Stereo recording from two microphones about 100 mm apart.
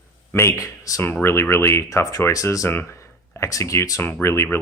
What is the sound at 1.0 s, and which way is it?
Speech, 25° left (ahead or behind).